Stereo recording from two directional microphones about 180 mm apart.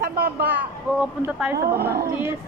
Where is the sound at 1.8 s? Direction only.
60° right (ahead or behind).